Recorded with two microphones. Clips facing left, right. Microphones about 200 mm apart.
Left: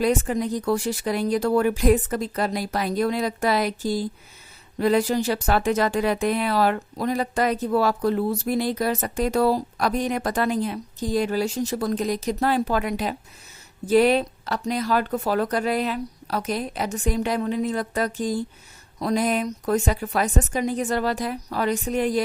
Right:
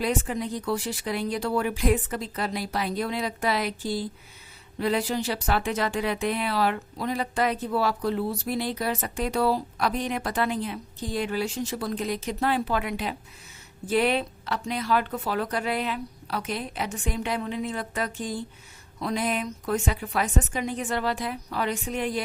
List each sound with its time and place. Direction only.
0.0 s speech: 40° left (ahead or behind)